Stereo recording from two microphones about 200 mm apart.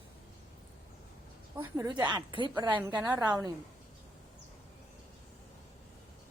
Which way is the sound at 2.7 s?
10° right (ahead or behind).